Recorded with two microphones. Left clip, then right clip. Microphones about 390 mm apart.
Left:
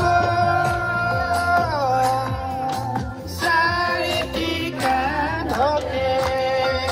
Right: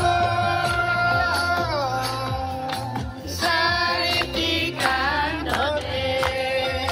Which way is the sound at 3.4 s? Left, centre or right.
Left.